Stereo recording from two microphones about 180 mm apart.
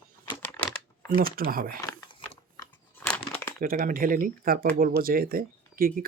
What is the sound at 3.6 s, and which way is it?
Speech, 50° right (ahead or behind).